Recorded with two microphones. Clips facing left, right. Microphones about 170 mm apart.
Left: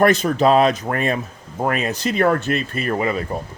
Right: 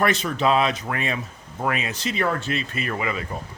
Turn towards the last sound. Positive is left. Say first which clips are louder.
# left 6 dB
turn(degrees=40)  # may be behind; listen again after turning